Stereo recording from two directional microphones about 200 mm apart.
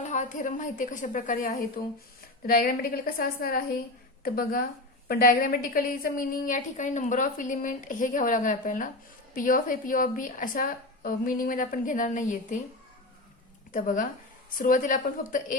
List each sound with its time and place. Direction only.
0.0 s a woman's voice: 40° left (ahead or behind)
13.7 s a woman's voice: 40° left (ahead or behind)